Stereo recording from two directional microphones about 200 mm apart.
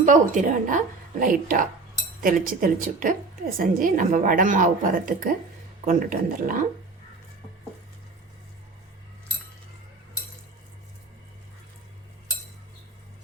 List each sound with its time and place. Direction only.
0.0 s a woman's voice: 40° right (ahead or behind)